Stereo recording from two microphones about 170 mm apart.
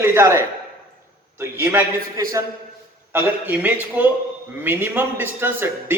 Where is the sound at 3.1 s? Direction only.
10° right (ahead or behind).